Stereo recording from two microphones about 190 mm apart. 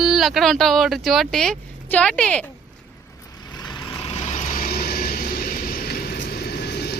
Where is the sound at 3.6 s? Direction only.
25° left (ahead or behind); by 6.9 s 60° left (ahead or behind).